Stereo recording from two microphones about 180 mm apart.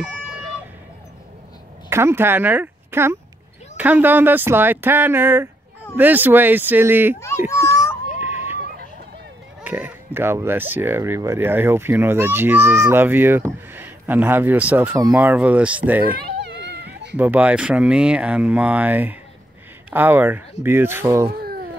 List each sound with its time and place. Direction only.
1.9 s speech: 15° right (ahead or behind)
7.6 s a sound: 15° left (ahead or behind)
8.2 s a sound: 10° right (ahead or behind)
9.6 s speech: 5° right (ahead or behind)
16.2 s cat: 70° right (ahead or behind)
17.2 s speech: 10° right (ahead or behind)
21.3 s babbling: 60° right (ahead or behind)